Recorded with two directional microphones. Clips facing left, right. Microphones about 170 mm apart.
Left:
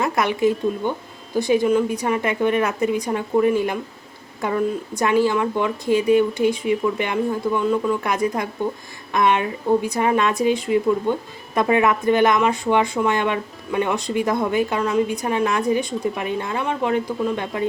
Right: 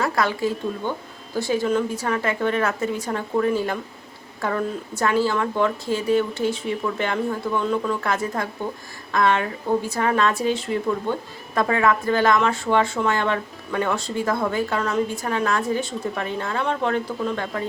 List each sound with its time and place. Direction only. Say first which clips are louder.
0.0 s speech: left 3 dB; 20° left (ahead or behind)